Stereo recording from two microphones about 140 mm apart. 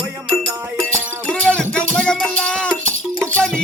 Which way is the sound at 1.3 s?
10° left (ahead or behind).